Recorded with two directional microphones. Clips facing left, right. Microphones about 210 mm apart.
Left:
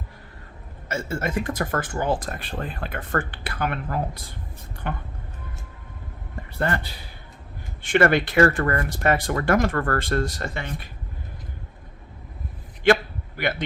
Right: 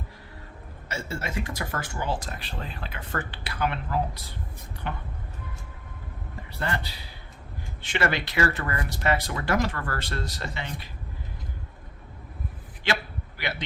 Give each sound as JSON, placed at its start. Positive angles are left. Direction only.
{"t": 0.9, "sound": "speech", "side_deg": 50}
{"t": 6.6, "sound": "speech", "side_deg": 50}
{"t": 12.8, "sound": "a sound", "side_deg": 50}